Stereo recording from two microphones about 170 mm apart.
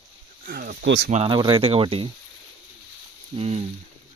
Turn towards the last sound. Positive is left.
turn(degrees=-40)  # may be behind; listen again after turning